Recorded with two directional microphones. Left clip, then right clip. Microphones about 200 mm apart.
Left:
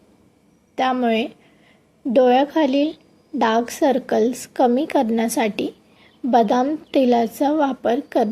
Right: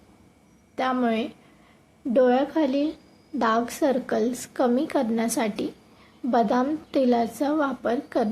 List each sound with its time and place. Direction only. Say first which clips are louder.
0.8 s a woman's voice: left 5 dB; 20° left (ahead or behind)